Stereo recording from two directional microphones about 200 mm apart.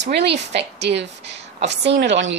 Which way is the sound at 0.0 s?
55° right (ahead or behind).